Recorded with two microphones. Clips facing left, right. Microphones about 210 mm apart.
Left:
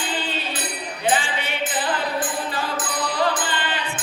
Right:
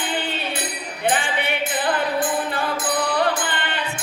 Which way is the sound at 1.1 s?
60° right (ahead or behind).